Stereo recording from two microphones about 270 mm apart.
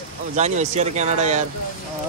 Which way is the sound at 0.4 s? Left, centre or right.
Right.